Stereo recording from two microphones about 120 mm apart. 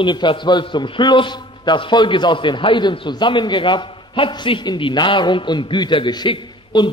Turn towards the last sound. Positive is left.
turn(degrees=40)  # may be behind; listen again after turning